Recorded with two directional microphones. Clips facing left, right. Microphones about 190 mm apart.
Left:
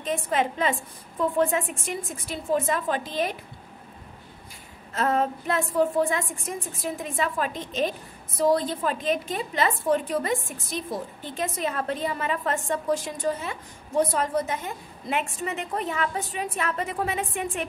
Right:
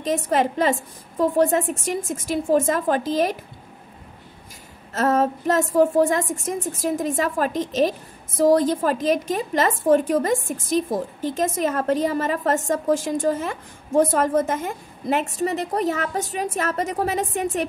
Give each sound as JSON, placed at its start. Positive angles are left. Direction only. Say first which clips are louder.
{"t": 0.0, "sound": "a woman's voice", "louder": "right 5 dB", "side_deg": -40}
{"t": 4.9, "sound": "a woman's voice", "louder": "right 5 dB", "side_deg": -40}